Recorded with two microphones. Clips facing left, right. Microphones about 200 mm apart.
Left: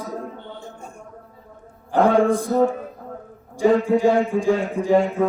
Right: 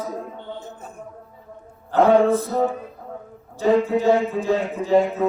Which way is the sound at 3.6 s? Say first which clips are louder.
Left 2 dB; 15° left (ahead or behind).